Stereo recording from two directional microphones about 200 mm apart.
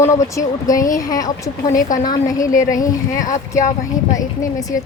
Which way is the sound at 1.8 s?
40° left (ahead or behind).